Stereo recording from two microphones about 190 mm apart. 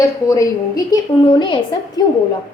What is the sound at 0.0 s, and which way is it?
Speech, 15° left (ahead or behind).